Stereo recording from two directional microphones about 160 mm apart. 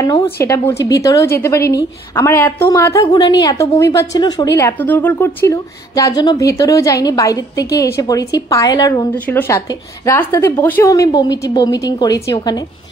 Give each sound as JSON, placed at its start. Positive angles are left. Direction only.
{"t": 0.0, "sound": "a woman's voice", "side_deg": 25}
{"t": 4.6, "sound": "a woman's voice", "side_deg": 10}
{"t": 9.1, "sound": "a woman's voice", "side_deg": 10}